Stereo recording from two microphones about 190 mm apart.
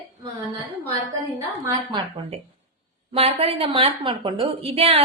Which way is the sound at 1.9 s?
25° right (ahead or behind).